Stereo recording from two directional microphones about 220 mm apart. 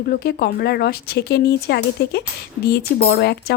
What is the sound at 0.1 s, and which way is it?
Speech, 45° left (ahead or behind).